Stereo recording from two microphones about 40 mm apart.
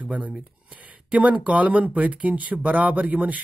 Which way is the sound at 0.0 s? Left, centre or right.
Right.